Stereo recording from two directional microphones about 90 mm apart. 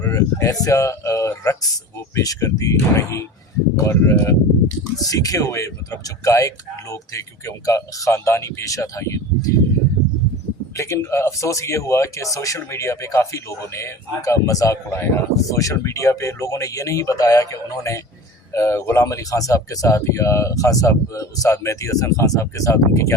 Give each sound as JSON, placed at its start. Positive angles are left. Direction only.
{"t": 0.1, "sound": "speech", "side_deg": 35}
{"t": 4.9, "sound": "speech", "side_deg": 40}
{"t": 10.8, "sound": "speech", "side_deg": 30}